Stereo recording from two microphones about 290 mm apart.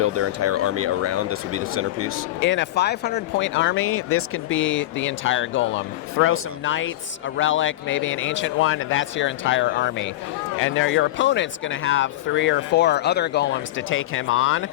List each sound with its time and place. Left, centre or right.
0.0 s speech: right
2.4 s speech: left